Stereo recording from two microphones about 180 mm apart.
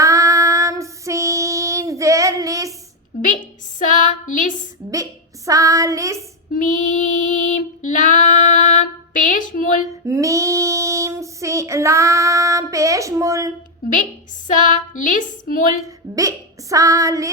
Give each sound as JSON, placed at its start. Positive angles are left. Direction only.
{"t": 0.0, "sound": "female singing", "side_deg": -20}
{"t": 3.8, "sound": "a sound", "side_deg": 45}
{"t": 5.5, "sound": "child singing", "side_deg": -20}
{"t": 6.5, "sound": "female singing", "side_deg": 45}
{"t": 10.1, "sound": "child singing", "side_deg": -20}
{"t": 14.4, "sound": "a sound", "side_deg": 45}
{"t": 16.1, "sound": "speech", "side_deg": -20}